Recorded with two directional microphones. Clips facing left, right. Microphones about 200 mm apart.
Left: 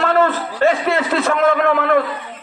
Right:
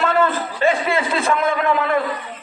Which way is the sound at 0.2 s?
70° left (ahead or behind).